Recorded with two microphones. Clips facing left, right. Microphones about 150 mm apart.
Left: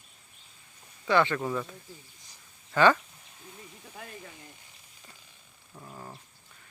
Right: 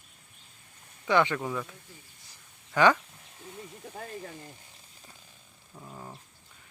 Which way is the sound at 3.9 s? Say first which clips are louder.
Right 5 dB; 40° right (ahead or behind).